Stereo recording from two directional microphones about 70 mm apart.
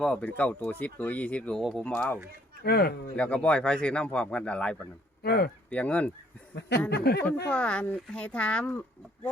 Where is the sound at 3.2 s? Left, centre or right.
Centre.